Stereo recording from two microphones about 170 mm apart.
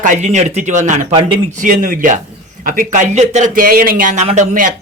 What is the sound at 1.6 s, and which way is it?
Speech, 55° right (ahead or behind).